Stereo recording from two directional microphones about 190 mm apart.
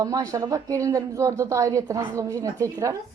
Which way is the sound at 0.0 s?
20° right (ahead or behind).